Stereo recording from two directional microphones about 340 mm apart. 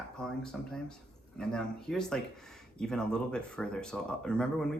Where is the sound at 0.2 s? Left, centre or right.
Centre.